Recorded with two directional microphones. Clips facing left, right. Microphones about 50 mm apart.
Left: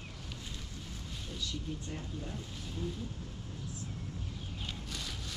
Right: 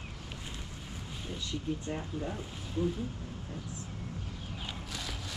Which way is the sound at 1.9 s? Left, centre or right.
Right.